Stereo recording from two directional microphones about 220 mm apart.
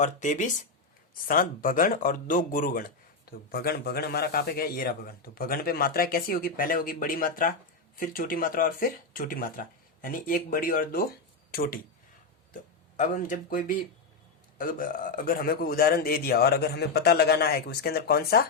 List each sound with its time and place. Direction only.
0.0 s speech: 35° left (ahead or behind)
13.0 s a man's voice: 35° left (ahead or behind)